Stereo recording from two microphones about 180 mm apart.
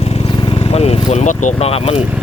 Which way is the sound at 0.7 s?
35° left (ahead or behind).